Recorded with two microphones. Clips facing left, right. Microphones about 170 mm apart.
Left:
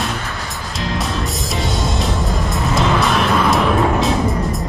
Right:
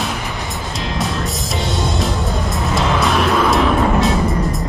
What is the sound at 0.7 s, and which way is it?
Music, centre (ahead or behind).